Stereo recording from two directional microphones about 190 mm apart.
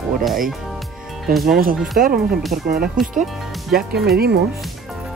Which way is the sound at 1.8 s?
Centre (ahead or behind).